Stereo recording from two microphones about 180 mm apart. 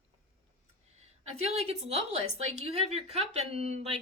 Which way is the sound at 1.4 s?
35° right (ahead or behind).